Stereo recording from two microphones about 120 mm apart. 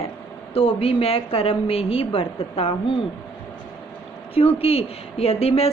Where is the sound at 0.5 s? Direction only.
50° left (ahead or behind).